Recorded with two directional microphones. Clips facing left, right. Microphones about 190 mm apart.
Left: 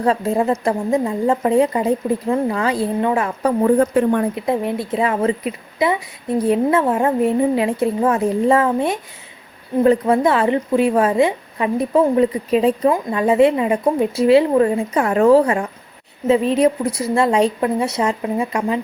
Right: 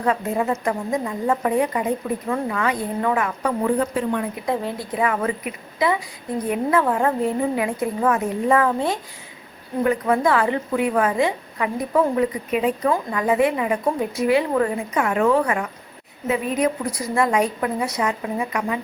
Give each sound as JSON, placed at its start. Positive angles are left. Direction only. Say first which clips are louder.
{"t": 0.0, "sound": "speech", "louder": "left 4 dB", "side_deg": 30}
{"t": 3.8, "sound": "speech", "louder": "left 7 dB", "side_deg": 50}
{"t": 4.4, "sound": "speech", "louder": "left 5 dB", "side_deg": 25}